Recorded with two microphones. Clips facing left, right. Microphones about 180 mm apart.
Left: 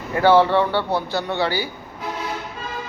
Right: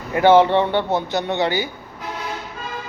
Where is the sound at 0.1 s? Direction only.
20° right (ahead or behind).